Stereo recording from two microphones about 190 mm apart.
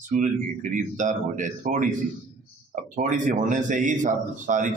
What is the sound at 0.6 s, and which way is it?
A man's voice, 40° right (ahead or behind).